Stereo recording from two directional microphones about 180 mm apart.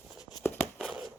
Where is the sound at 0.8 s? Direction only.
5° right (ahead or behind).